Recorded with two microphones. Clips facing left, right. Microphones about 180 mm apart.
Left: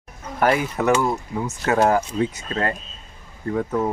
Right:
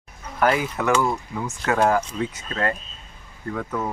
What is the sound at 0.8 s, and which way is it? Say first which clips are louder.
Speech: left 2 dB; 35° left (ahead or behind).